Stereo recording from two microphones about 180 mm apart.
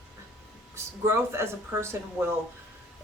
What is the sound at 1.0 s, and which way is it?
Speech, 15° right (ahead or behind).